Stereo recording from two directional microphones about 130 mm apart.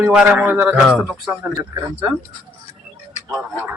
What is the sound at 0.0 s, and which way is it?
Speech, 10° right (ahead or behind).